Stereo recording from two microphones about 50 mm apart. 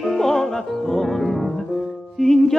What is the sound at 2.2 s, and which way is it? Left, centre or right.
Mantra, centre.